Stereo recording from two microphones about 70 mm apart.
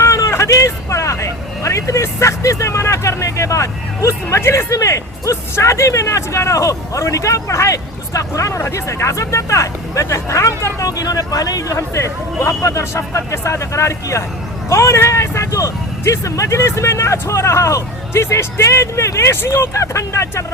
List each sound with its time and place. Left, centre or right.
0.0 s speech: left
11.8 s speech: left